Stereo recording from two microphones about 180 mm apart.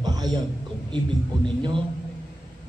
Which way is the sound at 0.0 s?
20° right (ahead or behind).